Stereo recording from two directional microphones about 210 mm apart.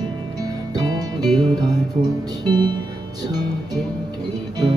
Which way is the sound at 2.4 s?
20° right (ahead or behind).